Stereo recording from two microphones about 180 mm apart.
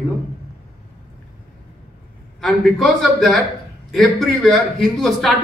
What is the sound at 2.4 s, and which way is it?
A man's voice, centre (ahead or behind).